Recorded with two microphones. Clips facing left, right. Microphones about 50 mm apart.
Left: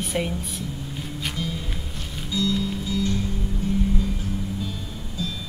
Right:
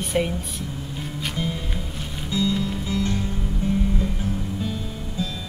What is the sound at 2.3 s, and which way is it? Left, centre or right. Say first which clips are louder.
Music: right 1 dB; right.